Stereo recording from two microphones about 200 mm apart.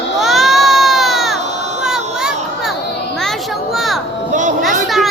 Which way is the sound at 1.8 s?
Centre (ahead or behind).